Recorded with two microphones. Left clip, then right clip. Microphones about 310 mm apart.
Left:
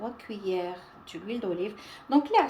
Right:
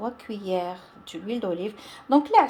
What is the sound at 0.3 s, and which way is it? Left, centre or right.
A woman's voice, centre.